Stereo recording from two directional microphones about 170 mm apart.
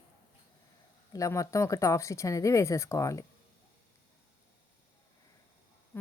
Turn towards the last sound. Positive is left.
turn(degrees=15)  # may be behind; listen again after turning